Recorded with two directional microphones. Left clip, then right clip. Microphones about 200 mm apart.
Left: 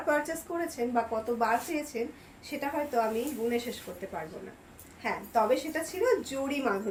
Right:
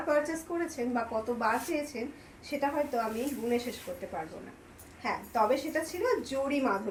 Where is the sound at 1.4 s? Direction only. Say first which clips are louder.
Left 2 dB; 25° left (ahead or behind).